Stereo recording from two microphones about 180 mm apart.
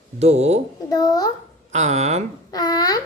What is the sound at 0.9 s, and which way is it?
Speech, 20° left (ahead or behind).